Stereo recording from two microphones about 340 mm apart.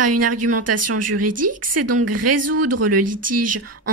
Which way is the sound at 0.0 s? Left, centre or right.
Right.